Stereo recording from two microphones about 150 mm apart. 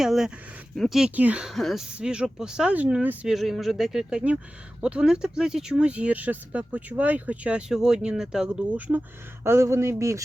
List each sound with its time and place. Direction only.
0.0 s speech: 5° right (ahead or behind)